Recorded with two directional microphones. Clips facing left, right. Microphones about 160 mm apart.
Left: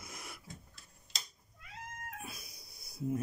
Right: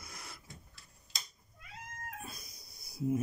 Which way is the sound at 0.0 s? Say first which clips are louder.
Left 2 dB; 20° left (ahead or behind).